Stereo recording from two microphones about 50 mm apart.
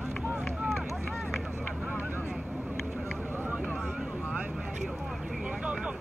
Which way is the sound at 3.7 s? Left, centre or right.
Right.